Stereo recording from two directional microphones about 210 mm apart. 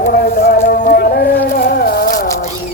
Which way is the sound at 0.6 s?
45° left (ahead or behind).